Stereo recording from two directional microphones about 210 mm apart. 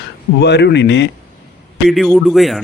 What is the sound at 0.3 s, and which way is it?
Speech, 55° left (ahead or behind).